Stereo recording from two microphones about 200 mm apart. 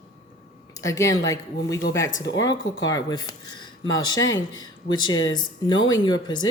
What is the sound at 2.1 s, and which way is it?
Speech, 65° left (ahead or behind).